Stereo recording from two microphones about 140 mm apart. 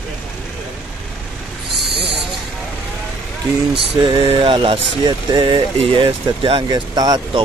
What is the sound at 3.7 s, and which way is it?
Speech, 40° right (ahead or behind).